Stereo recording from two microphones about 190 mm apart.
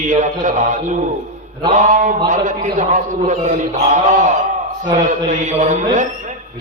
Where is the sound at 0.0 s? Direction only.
40° right (ahead or behind).